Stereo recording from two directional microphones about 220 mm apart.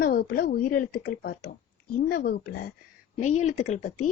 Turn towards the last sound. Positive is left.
turn(degrees=35)  # may be behind; listen again after turning